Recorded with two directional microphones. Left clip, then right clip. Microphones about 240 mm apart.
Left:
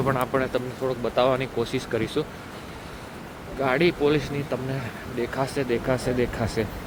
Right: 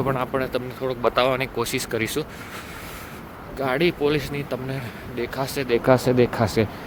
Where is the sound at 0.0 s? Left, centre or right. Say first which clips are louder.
Even; centre.